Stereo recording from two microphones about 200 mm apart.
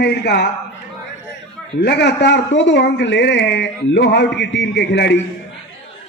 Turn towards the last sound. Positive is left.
turn(degrees=60)  # may be behind; listen again after turning